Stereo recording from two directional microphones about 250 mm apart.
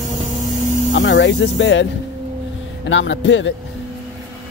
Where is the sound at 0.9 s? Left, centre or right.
Left.